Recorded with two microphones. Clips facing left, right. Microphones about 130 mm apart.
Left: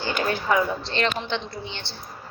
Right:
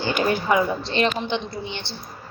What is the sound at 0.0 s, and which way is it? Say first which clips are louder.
A woman's voice: right 3 dB; 15° right (ahead or behind).